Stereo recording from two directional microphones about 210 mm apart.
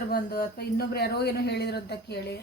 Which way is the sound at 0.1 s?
45° left (ahead or behind).